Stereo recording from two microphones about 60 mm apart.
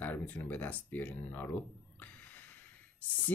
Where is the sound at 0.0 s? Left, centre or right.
Left.